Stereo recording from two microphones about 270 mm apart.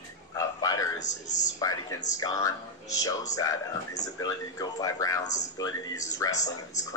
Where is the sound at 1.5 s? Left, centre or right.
Centre.